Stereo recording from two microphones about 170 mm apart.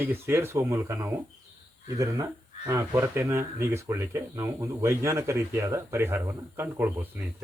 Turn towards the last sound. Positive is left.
turn(degrees=-10)  # may be behind; listen again after turning